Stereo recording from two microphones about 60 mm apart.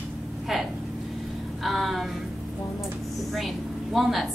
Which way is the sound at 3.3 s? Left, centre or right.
Centre.